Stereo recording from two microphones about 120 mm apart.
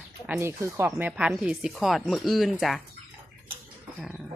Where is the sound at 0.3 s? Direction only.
20° right (ahead or behind).